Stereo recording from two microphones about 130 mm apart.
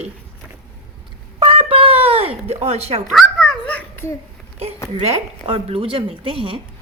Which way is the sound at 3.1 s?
Centre (ahead or behind).